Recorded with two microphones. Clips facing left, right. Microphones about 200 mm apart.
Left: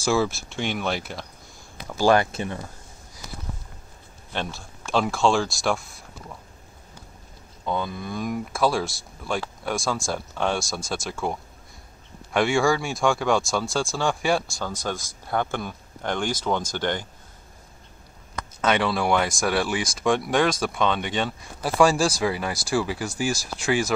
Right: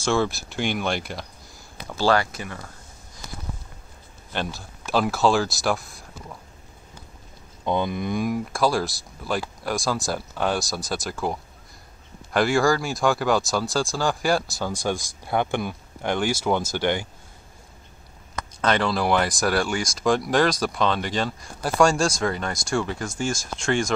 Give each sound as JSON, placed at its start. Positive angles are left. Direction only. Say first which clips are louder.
{"t": 0.0, "sound": "speech", "louder": "even", "side_deg": 5}
{"t": 2.0, "sound": "speech", "louder": "left 2 dB", "side_deg": 20}
{"t": 4.3, "sound": "speech", "louder": "right 1 dB", "side_deg": 0}
{"t": 7.6, "sound": "speech", "louder": "right 4 dB", "side_deg": -20}
{"t": 8.3, "sound": "speech", "louder": "left 2 dB", "side_deg": 0}
{"t": 18.6, "sound": "speech", "louder": "even", "side_deg": 5}